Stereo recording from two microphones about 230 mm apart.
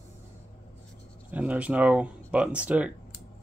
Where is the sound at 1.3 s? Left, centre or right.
Centre.